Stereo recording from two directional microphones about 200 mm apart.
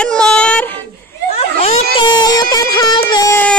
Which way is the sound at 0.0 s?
5° left (ahead or behind).